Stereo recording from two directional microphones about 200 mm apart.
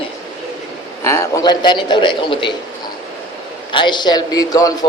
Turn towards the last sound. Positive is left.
turn(degrees=20)  # may be behind; listen again after turning